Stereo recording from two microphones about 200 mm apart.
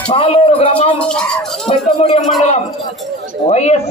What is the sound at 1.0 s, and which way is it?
Speech, 5° left (ahead or behind).